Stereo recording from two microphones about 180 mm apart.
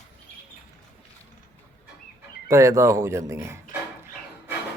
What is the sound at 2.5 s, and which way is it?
Speech, 15° right (ahead or behind).